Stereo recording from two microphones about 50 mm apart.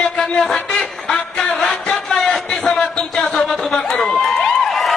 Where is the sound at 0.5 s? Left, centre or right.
Centre.